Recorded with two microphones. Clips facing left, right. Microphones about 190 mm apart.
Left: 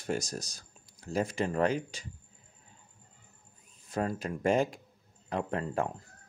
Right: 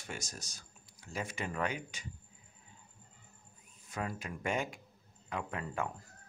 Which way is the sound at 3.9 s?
35° left (ahead or behind).